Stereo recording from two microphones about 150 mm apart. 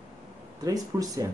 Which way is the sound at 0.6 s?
25° right (ahead or behind).